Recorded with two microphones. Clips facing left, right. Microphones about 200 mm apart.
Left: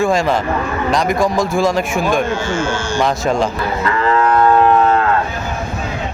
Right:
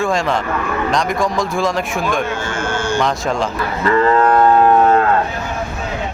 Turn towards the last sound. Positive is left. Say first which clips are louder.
# right 2 dB
turn(degrees=-35)  # may be behind; listen again after turning